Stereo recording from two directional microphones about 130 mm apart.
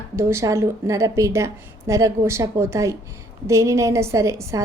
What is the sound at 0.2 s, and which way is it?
A woman's voice, 20° right (ahead or behind).